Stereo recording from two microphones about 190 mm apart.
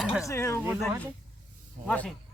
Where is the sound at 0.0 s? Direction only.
Centre (ahead or behind).